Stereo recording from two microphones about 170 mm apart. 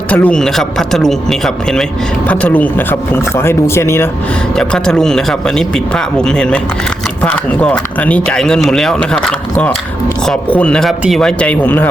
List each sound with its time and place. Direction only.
0.1 s speech: 10° left (ahead or behind)
4.5 s speech: 5° left (ahead or behind)